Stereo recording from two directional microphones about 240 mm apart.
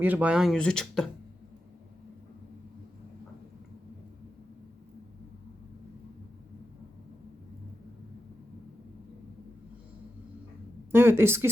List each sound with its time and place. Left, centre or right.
0.0 s speech: centre
10.9 s speech: centre